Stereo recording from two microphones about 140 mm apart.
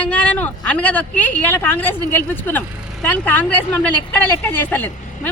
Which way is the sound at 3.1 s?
10° left (ahead or behind).